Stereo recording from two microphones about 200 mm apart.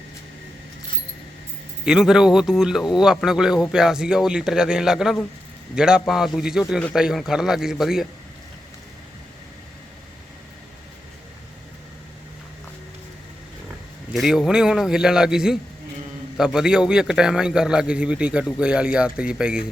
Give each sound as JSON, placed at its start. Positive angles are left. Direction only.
{"t": 1.8, "sound": "speech", "side_deg": -5}
{"t": 14.1, "sound": "speech", "side_deg": 0}